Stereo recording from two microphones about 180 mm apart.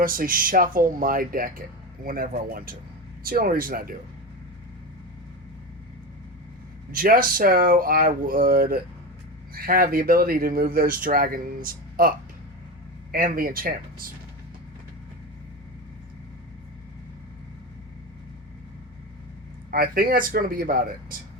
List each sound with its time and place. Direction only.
0.0 s speech: 50° right (ahead or behind)
6.9 s speech: 50° right (ahead or behind)
19.7 s speech: 55° right (ahead or behind)